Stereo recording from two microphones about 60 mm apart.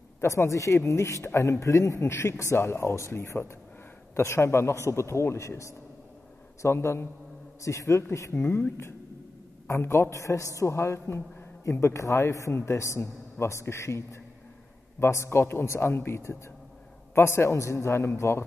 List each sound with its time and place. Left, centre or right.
0.2 s a man's voice: left
9.7 s a woman's voice: left